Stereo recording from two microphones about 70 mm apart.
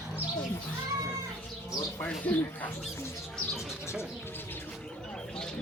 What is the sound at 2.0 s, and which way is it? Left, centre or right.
Speech, left.